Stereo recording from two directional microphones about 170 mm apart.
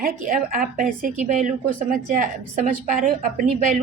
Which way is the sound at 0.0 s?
55° right (ahead or behind).